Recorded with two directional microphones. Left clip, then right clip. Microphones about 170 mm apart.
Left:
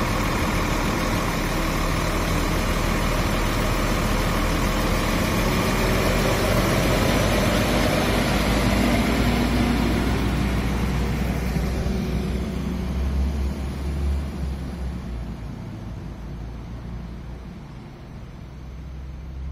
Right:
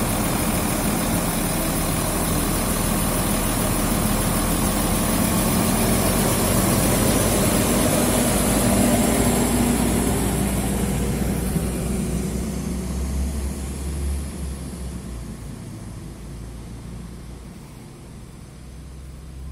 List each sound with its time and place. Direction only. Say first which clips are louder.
0.0 s vehicle: even; 50° right (ahead or behind)